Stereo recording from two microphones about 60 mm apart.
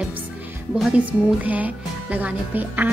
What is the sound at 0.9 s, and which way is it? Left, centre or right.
Speech, right.